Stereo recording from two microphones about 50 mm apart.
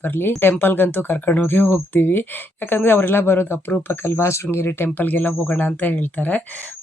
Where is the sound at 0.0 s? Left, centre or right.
Left.